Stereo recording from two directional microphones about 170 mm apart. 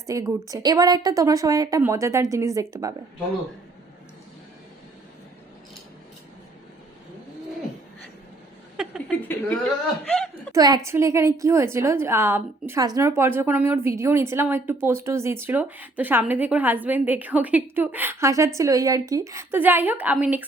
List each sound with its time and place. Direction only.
0.1 s a woman's voice: 20° right (ahead or behind)
9.0 s speech: 10° left (ahead or behind)
10.5 s a woman's voice: 20° right (ahead or behind)